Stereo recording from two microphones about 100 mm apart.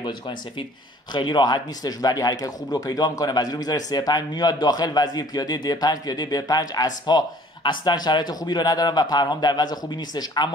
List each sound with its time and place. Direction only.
0.0 s speech: 50° left (ahead or behind)